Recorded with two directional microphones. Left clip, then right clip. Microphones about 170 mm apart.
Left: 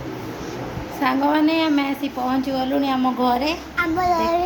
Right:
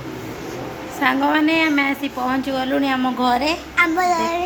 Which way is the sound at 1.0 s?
Centre (ahead or behind).